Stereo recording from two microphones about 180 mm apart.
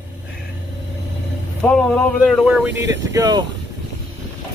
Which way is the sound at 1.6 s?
10° left (ahead or behind).